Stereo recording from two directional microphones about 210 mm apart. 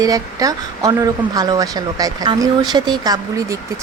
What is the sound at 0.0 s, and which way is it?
Speech, 15° right (ahead or behind).